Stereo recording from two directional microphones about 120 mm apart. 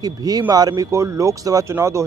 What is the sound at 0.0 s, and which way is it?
Speech, 30° right (ahead or behind).